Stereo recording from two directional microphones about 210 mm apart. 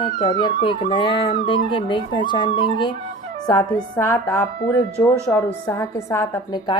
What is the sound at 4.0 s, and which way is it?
Speech, 10° left (ahead or behind).